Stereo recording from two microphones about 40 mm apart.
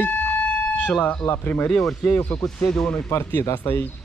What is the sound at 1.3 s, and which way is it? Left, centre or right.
Speech, left.